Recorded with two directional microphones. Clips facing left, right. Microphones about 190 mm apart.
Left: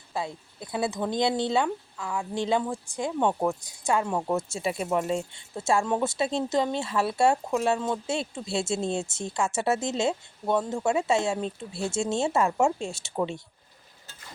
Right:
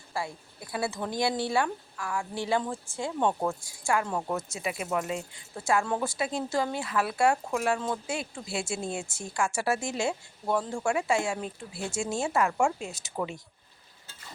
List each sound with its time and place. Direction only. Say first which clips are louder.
0.1 s speech: left 2 dB; 20° left (ahead or behind)